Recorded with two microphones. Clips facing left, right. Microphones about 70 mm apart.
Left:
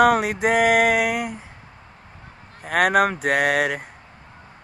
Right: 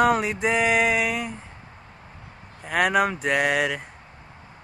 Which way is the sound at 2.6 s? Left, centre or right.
Left.